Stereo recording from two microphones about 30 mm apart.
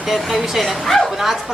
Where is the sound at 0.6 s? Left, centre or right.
Centre.